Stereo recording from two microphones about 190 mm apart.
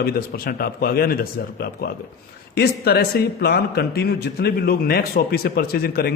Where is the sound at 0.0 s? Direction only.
50° left (ahead or behind).